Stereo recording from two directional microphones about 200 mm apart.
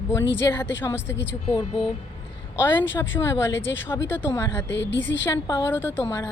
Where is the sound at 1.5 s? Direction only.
25° left (ahead or behind).